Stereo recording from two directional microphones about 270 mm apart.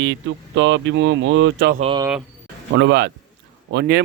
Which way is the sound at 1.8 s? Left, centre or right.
Centre.